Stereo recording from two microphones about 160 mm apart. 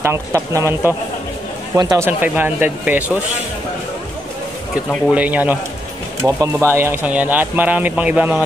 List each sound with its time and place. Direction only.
0.0 s speech: 15° right (ahead or behind)
2.0 s speech: 10° right (ahead or behind)
5.1 s speech: 10° right (ahead or behind)